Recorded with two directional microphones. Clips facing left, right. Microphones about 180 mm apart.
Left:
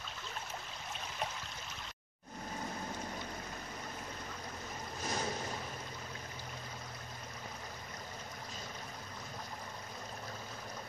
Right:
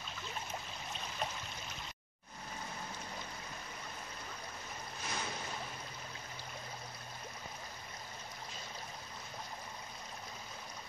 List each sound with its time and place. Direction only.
5.0 s boat: 40° left (ahead or behind)